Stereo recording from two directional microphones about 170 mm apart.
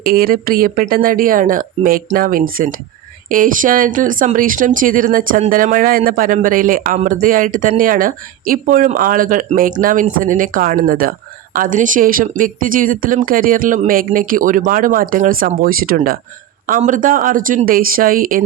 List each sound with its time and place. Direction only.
0.0 s speech: 60° right (ahead or behind)